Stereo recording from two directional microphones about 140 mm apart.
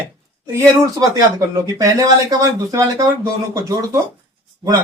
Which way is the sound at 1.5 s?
25° right (ahead or behind).